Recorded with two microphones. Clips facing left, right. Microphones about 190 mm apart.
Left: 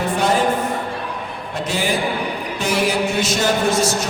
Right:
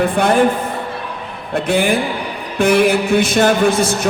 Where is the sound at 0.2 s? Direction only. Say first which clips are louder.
Right 4 dB; 55° right (ahead or behind).